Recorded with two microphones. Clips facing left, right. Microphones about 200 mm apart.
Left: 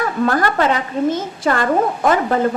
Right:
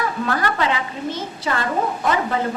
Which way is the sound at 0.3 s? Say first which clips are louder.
Left 5 dB; 45° left (ahead or behind).